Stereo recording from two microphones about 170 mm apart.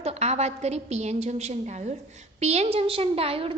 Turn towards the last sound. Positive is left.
turn(degrees=-35)  # may be behind; listen again after turning